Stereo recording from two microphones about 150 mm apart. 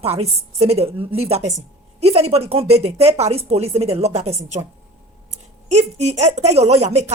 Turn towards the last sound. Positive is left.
turn(degrees=-45)  # may be behind; listen again after turning